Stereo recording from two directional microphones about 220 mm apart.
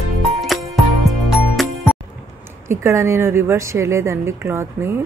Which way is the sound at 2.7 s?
10° right (ahead or behind).